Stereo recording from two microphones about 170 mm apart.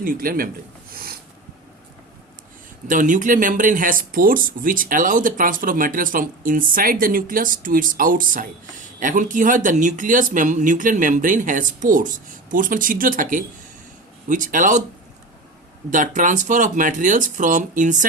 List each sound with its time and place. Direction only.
0.0 s a man's voice: 55° right (ahead or behind)
2.8 s speech: 50° right (ahead or behind)
15.9 s speech: 50° right (ahead or behind)